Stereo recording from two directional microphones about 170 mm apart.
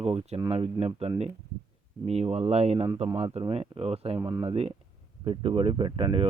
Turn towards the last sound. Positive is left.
turn(degrees=-30)  # may be behind; listen again after turning